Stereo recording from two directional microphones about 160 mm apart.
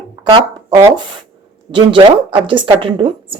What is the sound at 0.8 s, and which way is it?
Speech, 20° right (ahead or behind).